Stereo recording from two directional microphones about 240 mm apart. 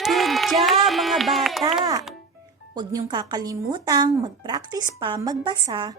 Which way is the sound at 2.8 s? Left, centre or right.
Centre.